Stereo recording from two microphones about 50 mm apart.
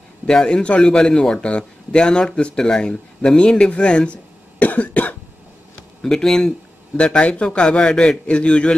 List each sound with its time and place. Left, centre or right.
0.3 s a man's voice: centre
4.6 s cough: left
5.8 s a sound: centre
7.0 s a man's voice: left